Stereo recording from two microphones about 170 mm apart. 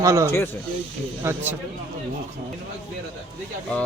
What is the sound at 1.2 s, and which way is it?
Speech, 15° right (ahead or behind).